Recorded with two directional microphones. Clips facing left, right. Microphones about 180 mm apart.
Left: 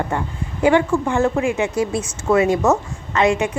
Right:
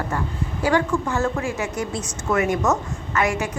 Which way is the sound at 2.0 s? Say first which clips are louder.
Left 4 dB; 30° left (ahead or behind).